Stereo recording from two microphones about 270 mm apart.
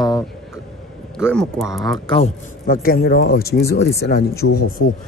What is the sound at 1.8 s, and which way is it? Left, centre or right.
Speech, centre.